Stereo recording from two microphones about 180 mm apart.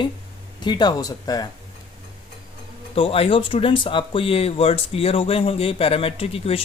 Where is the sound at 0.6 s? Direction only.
25° left (ahead or behind).